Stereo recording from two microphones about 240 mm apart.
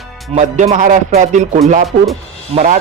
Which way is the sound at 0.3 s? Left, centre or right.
Right.